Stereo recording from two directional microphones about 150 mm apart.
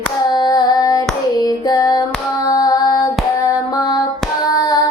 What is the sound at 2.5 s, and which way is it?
Female singing, 25° left (ahead or behind).